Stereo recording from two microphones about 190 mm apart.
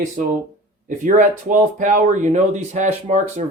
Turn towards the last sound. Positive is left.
turn(degrees=-40)  # may be behind; listen again after turning